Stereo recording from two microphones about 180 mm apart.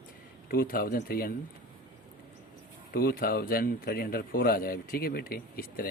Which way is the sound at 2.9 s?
55° left (ahead or behind).